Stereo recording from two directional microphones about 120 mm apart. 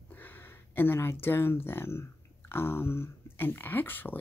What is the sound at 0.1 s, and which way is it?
Speech, 15° left (ahead or behind).